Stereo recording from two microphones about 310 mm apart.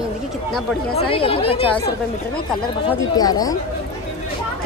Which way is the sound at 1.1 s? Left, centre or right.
Centre.